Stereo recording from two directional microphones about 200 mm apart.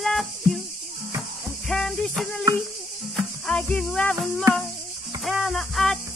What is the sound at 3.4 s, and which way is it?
Speech, 5° left (ahead or behind).